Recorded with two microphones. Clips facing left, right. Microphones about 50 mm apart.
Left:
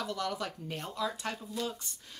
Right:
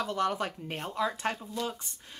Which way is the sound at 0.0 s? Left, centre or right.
Right.